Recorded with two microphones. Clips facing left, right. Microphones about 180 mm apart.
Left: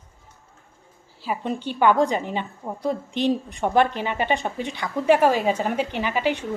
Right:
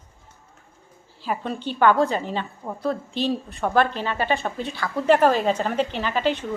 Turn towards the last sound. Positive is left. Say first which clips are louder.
# even
turn(degrees=10)  # may be behind; listen again after turning